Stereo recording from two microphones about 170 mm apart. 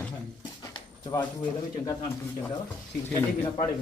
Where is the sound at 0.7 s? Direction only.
25° left (ahead or behind).